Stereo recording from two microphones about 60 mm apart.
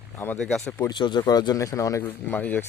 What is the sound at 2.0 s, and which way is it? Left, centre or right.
Speech, left.